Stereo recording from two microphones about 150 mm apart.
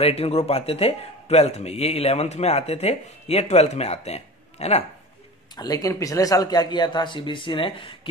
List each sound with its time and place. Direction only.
0.0 s speech: 45° left (ahead or behind)
5.6 s a man's voice: 25° left (ahead or behind)